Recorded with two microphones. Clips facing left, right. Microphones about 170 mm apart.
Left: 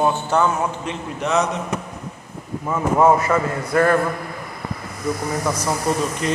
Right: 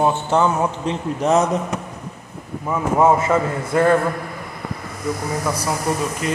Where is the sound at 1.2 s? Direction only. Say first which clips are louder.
Right 3 dB; 45° right (ahead or behind).